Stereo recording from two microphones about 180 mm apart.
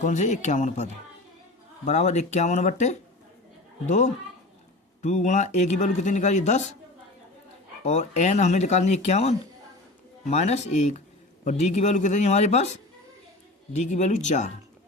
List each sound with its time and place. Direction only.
0.0 s speech: 45° left (ahead or behind)
1.9 s a man's voice: 40° left (ahead or behind)
7.9 s a man's voice: 40° left (ahead or behind)